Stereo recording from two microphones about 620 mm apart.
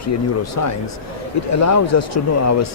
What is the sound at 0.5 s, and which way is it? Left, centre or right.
Speech, left.